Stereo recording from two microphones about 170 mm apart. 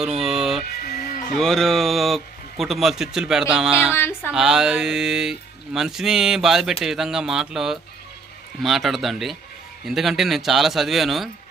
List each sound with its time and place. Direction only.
0.2 s music: centre (ahead or behind)
0.8 s music: 55° left (ahead or behind)
1.4 s speech: centre (ahead or behind)
3.9 s a sound: 10° left (ahead or behind)
4.3 s speech: 5° right (ahead or behind)